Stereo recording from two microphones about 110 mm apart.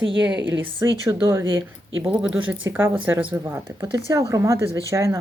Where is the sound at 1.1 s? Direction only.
25° right (ahead or behind).